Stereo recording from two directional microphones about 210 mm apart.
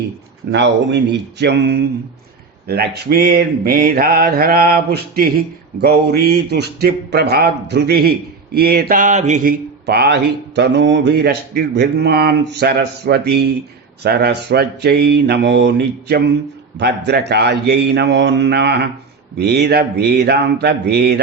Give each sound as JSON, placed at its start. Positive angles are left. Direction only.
{"t": 0.5, "sound": "speech", "side_deg": -55}